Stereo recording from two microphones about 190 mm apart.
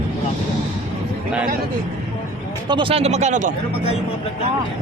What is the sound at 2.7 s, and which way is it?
Speech, 25° right (ahead or behind).